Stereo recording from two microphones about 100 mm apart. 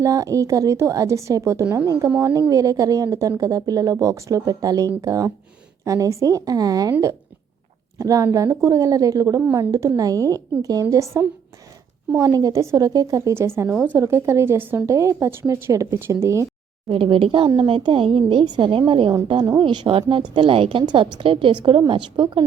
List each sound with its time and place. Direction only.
0.0 s a woman's voice: 35° right (ahead or behind)
7.9 s a woman's voice: 35° right (ahead or behind)
16.9 s a woman's voice: 65° right (ahead or behind)